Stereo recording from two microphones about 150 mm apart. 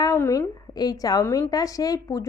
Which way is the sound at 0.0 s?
20° left (ahead or behind).